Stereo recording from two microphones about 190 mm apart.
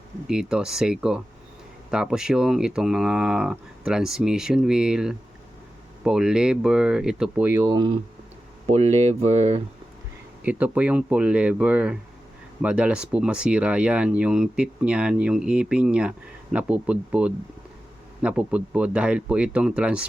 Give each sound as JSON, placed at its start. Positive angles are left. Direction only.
{"t": 0.3, "sound": "speech", "side_deg": -5}
{"t": 7.7, "sound": "speech", "side_deg": -25}
{"t": 8.6, "sound": "speech", "side_deg": -35}
{"t": 10.4, "sound": "speech", "side_deg": -10}